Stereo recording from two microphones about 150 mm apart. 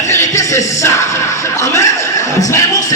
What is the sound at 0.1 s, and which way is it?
Music, 20° left (ahead or behind).